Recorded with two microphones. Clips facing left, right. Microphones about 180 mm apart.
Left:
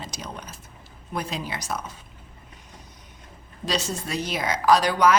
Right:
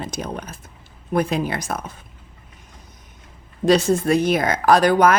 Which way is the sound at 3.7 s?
55° right (ahead or behind).